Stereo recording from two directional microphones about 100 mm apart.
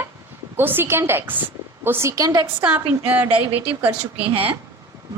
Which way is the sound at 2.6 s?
20° right (ahead or behind).